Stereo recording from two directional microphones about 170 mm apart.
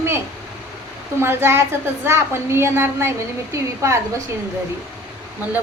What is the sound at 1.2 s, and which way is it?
A woman's voice, 15° right (ahead or behind).